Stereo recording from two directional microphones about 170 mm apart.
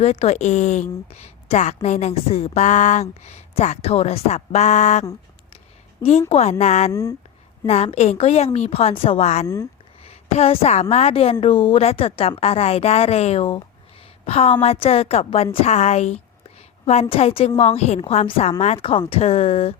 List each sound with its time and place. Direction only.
0.0 s a woman's voice: 40° left (ahead or behind)
6.9 s speech: 20° left (ahead or behind)
7.7 s a woman's voice: 40° left (ahead or behind)